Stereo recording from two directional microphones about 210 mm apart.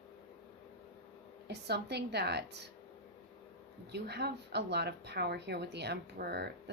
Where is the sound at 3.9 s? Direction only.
50° right (ahead or behind).